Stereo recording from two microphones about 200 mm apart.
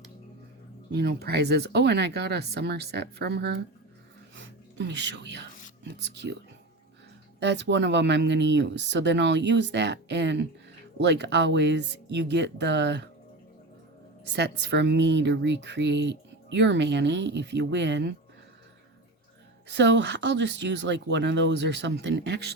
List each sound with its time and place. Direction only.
0.9 s speech: 55° right (ahead or behind)
4.4 s a sound: 60° right (ahead or behind)
7.3 s speech: 60° right (ahead or behind)
14.3 s speech: 60° right (ahead or behind)
19.6 s speech: 60° right (ahead or behind)